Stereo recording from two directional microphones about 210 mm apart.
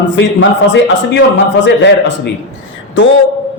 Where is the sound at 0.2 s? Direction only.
60° left (ahead or behind).